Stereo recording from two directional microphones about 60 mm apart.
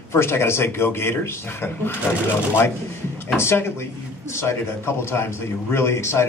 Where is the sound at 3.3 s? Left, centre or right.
Left.